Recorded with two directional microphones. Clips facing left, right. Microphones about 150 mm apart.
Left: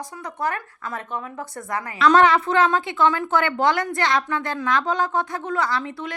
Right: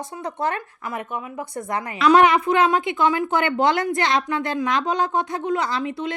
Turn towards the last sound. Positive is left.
turn(degrees=-20)  # may be behind; listen again after turning